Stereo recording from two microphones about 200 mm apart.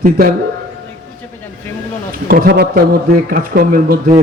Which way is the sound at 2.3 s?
50° right (ahead or behind).